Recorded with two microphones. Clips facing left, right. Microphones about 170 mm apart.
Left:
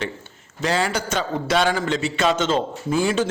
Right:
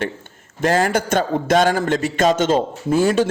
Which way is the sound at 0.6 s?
50° right (ahead or behind).